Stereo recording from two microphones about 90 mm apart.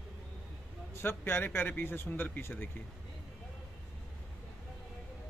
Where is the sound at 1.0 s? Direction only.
25° left (ahead or behind).